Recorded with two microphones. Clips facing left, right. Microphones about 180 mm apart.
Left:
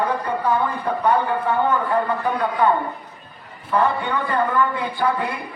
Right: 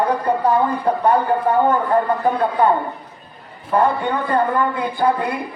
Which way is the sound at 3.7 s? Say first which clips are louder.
Right 3 dB; 40° right (ahead or behind).